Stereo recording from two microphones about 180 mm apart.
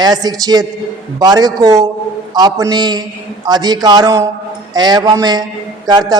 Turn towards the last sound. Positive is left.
turn(degrees=-20)  # may be behind; listen again after turning